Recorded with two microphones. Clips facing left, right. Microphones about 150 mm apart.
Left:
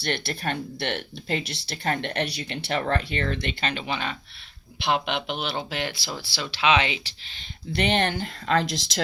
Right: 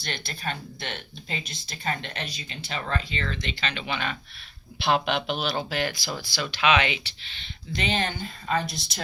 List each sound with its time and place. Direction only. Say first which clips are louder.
0.0 s speech: left 5 dB; 60° left (ahead or behind)
2.8 s speech: left 5 dB; 55° left (ahead or behind); by 4.1 s 35° left (ahead or behind)
4.8 s speech: right 1 dB; 20° left (ahead or behind)
7.7 s speech: left 4 dB; 65° left (ahead or behind); by 9.0 s 90° left